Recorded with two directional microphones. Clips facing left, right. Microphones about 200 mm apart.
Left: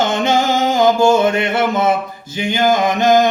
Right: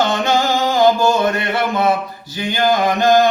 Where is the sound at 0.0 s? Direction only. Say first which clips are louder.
Left 1 dB; 20° left (ahead or behind).